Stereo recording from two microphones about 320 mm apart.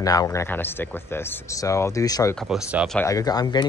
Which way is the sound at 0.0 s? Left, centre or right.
Centre.